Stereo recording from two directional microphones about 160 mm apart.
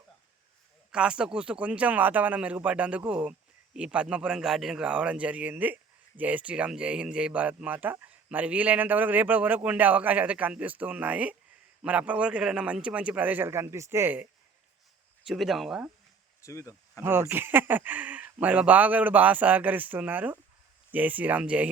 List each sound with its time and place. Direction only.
0.9 s a man's voice: 5° right (ahead or behind)
15.3 s speech: centre (ahead or behind)
16.4 s speech: 20° left (ahead or behind)
17.0 s a man's voice: 15° right (ahead or behind)